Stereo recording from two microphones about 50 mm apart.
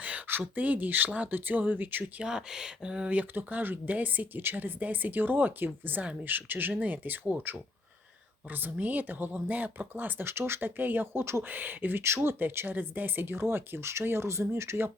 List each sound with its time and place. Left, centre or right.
0.0 s speech: right
2.2 s speech: centre
3.1 s speech: right
10.2 s speech: right
11.4 s speech: right
12.0 s speech: right